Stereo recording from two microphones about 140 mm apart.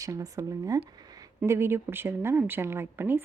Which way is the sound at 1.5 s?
15° right (ahead or behind).